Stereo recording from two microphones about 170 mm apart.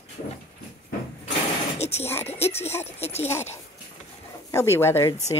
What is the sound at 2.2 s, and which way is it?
Speech, 35° left (ahead or behind).